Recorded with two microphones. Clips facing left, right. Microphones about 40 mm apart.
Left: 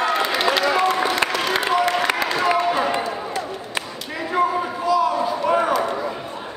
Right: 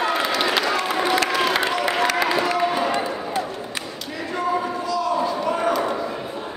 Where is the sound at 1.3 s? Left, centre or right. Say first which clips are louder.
Even; centre.